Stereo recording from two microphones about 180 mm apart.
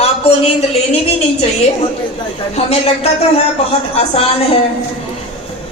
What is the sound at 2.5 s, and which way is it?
Speech, 35° left (ahead or behind).